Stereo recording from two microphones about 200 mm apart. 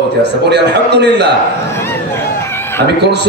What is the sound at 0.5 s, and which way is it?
Speech, 55° right (ahead or behind).